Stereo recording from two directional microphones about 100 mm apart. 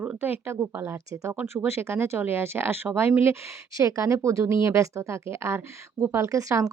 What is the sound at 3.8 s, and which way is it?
Speech, 30° right (ahead or behind).